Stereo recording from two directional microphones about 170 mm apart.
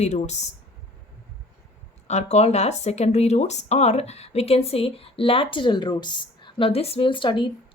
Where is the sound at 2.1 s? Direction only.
40° left (ahead or behind).